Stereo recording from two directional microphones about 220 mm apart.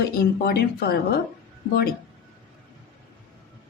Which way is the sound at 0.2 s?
45° left (ahead or behind).